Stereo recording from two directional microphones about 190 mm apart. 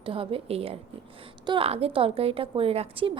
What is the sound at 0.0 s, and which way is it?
A woman's voice, 30° right (ahead or behind).